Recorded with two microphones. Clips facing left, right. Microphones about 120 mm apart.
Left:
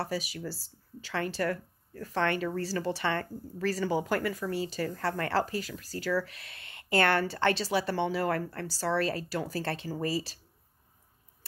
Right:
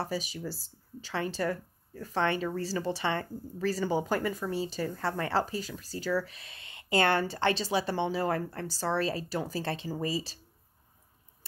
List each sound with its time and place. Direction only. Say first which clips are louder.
0.5 s speech: even; 20° right (ahead or behind)